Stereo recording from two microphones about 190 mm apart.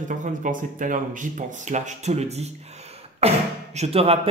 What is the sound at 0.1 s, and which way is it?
Speech, 40° right (ahead or behind).